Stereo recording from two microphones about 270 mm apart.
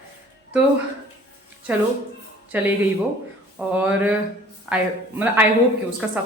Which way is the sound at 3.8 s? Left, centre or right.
Centre.